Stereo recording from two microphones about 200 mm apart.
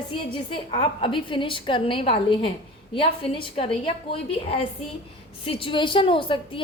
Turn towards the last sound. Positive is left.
turn(degrees=25)  # may be behind; listen again after turning